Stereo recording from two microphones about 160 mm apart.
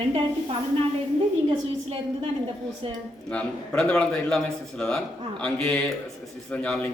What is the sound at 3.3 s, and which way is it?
A man's voice, 5° left (ahead or behind).